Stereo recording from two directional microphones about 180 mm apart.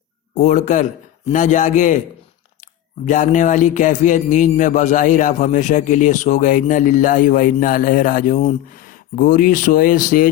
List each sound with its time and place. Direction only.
0.3 s a man's voice: 40° left (ahead or behind)
3.1 s a man's voice: 45° left (ahead or behind)